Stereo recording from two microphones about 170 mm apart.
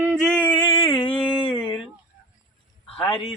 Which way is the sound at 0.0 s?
Centre (ahead or behind).